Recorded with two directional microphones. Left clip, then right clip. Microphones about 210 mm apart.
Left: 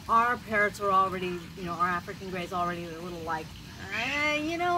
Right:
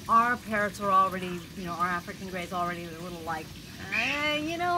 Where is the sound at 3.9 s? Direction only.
10° right (ahead or behind).